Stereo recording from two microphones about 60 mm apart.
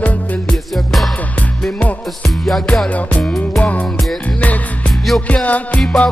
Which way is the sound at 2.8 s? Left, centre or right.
Left.